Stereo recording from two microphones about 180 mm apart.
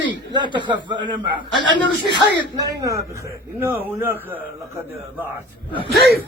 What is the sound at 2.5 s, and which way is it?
A man's voice, 20° right (ahead or behind).